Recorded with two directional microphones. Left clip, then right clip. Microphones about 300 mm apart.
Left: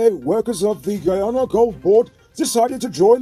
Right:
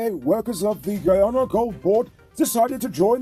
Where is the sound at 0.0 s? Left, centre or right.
Right.